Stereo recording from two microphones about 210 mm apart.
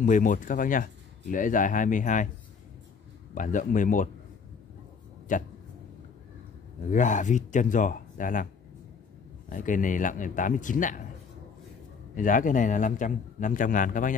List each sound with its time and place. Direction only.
0.0 s a man's voice: 35° left (ahead or behind)
3.3 s a man's voice: 40° left (ahead or behind)
5.3 s a man's voice: 40° left (ahead or behind)
6.9 s a man's voice: 35° left (ahead or behind)
9.5 s a man's voice: 40° left (ahead or behind)
12.2 s a man's voice: 40° left (ahead or behind)